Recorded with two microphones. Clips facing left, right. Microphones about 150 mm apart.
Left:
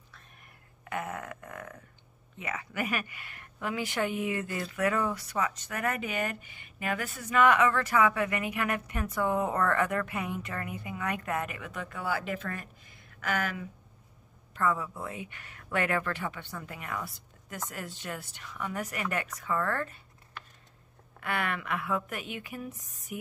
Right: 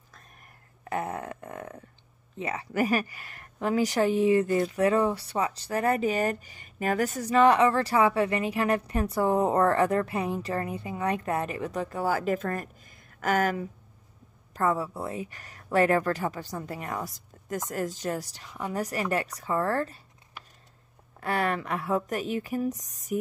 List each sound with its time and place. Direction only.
0.8 s a sound: 35° right (ahead or behind)
2.3 s speech: 35° right (ahead or behind)
21.2 s speech: 35° right (ahead or behind)